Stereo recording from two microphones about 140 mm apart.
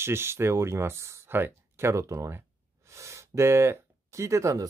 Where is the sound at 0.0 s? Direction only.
20° right (ahead or behind).